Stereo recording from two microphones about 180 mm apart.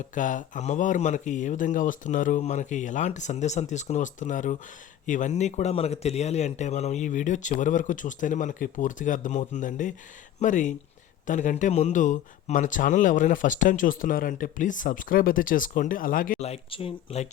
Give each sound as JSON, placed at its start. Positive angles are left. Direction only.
{"t": 0.0, "sound": "speech", "side_deg": 45}
{"t": 16.5, "sound": "speech", "side_deg": 30}